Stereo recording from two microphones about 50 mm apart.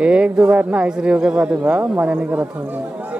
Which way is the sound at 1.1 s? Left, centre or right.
Right.